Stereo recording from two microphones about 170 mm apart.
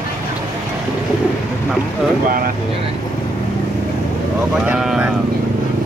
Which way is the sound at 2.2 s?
55° right (ahead or behind).